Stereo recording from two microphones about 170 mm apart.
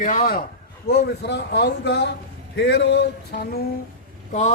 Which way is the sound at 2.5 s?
80° left.